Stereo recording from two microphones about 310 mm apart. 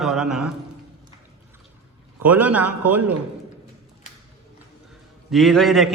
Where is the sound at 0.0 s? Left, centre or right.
Centre.